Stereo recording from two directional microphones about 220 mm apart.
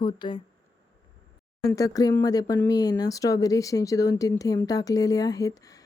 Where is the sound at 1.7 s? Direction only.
15° left (ahead or behind).